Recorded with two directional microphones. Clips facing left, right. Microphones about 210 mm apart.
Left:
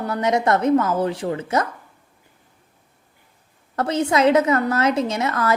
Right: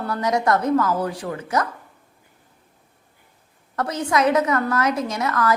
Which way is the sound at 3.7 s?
25° left (ahead or behind).